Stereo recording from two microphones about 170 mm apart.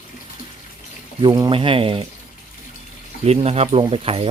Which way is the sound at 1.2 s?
25° right (ahead or behind).